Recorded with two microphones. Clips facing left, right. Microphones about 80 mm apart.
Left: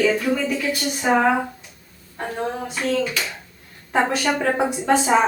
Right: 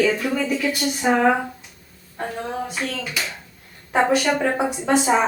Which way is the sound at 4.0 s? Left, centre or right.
Centre.